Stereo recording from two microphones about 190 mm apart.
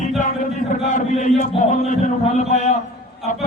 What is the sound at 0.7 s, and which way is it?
Speech, 40° left (ahead or behind).